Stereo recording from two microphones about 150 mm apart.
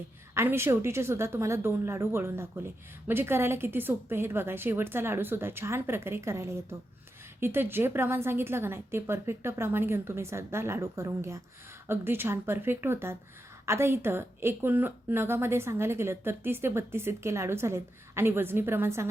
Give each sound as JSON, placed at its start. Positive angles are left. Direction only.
{"t": 0.3, "sound": "a woman's voice", "side_deg": -15}